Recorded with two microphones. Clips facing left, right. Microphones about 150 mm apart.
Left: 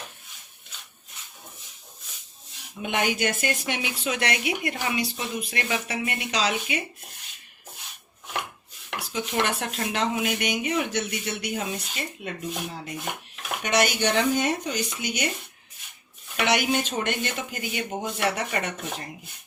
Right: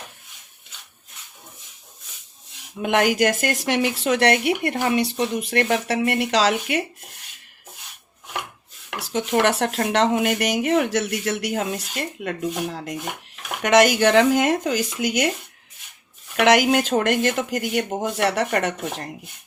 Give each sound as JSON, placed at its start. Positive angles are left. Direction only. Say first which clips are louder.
{"t": 2.8, "sound": "speech", "louder": "right 7 dB", "side_deg": -90}
{"t": 3.7, "sound": "speech", "louder": "right 8 dB", "side_deg": -70}
{"t": 5.3, "sound": "speech", "louder": "right 8 dB", "side_deg": -75}
{"t": 9.4, "sound": "speech", "louder": "right 6 dB", "side_deg": -75}
{"t": 13.6, "sound": "speech", "louder": "right 8 dB", "side_deg": -90}
{"t": 16.4, "sound": "speech", "louder": "right 7 dB", "side_deg": -85}